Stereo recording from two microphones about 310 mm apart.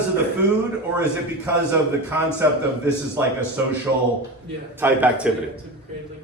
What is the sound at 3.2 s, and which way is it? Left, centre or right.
Speech, centre.